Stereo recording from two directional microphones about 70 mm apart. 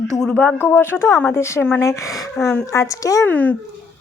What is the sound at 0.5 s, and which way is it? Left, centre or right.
A woman's voice, left.